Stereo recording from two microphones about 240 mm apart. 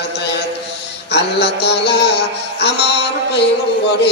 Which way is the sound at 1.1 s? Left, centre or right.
Left.